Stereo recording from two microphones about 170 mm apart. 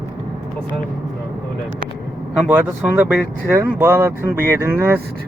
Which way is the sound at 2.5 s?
10° right (ahead or behind).